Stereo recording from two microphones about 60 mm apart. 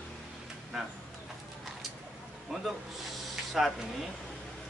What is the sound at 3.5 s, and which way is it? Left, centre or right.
Speech, centre.